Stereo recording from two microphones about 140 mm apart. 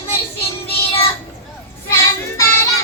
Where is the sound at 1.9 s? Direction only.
20° left (ahead or behind).